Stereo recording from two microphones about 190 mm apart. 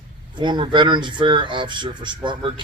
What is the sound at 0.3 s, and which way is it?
Speech, 25° right (ahead or behind).